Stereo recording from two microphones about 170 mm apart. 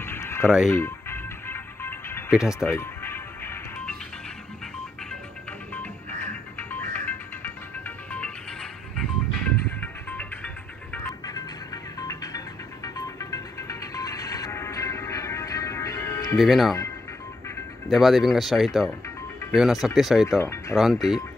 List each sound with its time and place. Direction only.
0.0 s music: 15° left (ahead or behind)
2.3 s speech: 5° right (ahead or behind)
2.7 s music: 15° left (ahead or behind)
6.7 s music: 10° left (ahead or behind)
11.2 s music: 20° left (ahead or behind)
16.3 s speech: centre (ahead or behind)
17.8 s speech: centre (ahead or behind)
20.2 s speech: 20° left (ahead or behind)
20.7 s speech: centre (ahead or behind)